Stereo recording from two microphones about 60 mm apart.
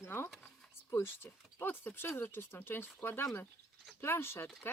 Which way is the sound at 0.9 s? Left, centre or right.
Left.